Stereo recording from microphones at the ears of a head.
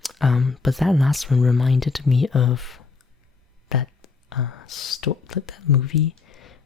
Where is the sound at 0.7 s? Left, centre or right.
Centre.